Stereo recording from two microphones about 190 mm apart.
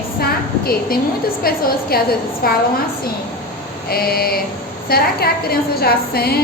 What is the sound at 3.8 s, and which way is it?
A woman's voice, 55° left (ahead or behind).